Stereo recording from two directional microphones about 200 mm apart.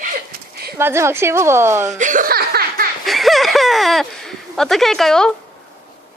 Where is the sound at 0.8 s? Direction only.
10° right (ahead or behind).